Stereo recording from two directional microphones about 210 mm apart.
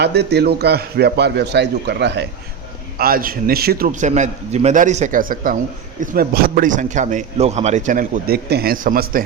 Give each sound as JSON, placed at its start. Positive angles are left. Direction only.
{"t": 0.0, "sound": "a man's voice", "side_deg": -50}
{"t": 3.0, "sound": "speech", "side_deg": -45}